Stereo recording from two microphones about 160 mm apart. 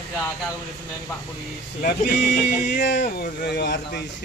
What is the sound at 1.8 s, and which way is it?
Speech, 70° left (ahead or behind).